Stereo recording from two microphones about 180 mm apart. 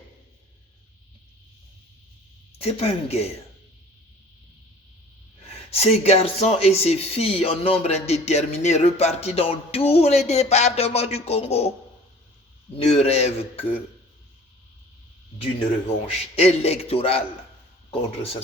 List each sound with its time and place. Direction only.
2.6 s speech: 35° left (ahead or behind)
5.5 s speech: 35° left (ahead or behind)
12.7 s speech: 35° left (ahead or behind)
16.0 s speech: 35° left (ahead or behind)